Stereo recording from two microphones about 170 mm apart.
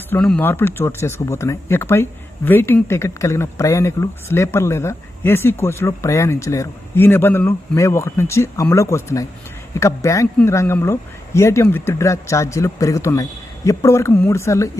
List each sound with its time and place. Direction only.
0.1 s speech: 5° left (ahead or behind)